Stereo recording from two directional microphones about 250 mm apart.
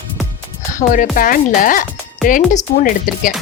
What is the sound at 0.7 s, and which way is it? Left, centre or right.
Speech, left.